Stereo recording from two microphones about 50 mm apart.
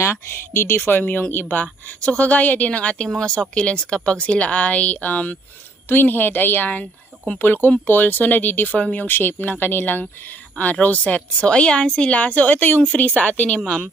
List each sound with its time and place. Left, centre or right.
0.0 s speech: left
1.0 s speech: left
5.9 s speech: left
11.4 s speech: left
13.1 s speech: left